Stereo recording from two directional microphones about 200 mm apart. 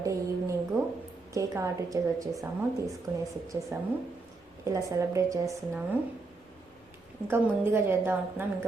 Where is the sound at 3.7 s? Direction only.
10° right (ahead or behind).